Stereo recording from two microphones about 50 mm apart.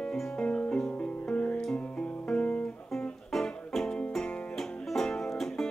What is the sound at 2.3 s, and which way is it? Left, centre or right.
Guitar, left.